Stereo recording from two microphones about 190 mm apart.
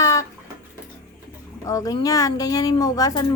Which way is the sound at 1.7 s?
20° left (ahead or behind).